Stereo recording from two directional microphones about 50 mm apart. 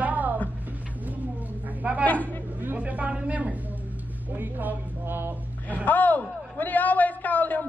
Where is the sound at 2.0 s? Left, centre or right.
Left.